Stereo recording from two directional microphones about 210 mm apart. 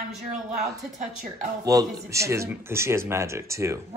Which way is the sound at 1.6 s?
15° right (ahead or behind).